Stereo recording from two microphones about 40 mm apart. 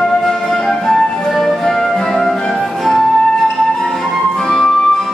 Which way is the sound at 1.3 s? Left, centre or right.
Centre.